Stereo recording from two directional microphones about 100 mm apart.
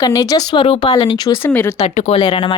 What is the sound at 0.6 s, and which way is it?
Speech, 55° left (ahead or behind).